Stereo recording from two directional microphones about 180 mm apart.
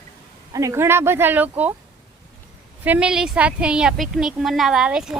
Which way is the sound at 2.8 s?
5° right (ahead or behind).